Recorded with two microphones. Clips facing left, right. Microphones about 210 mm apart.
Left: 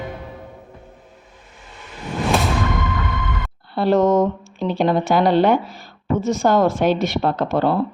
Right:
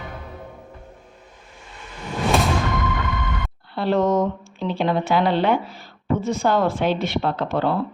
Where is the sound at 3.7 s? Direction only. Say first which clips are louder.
Left 4 dB; 45° left (ahead or behind).